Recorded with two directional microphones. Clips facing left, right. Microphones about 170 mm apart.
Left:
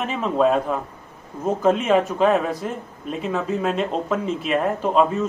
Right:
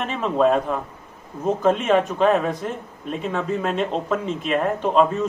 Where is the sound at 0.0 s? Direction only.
5° left (ahead or behind).